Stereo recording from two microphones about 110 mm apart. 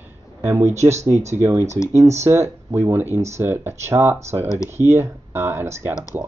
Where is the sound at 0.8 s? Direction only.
90° right.